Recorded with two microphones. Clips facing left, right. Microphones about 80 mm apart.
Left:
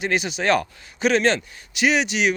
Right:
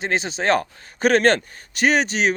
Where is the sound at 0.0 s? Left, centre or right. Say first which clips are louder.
Even; right.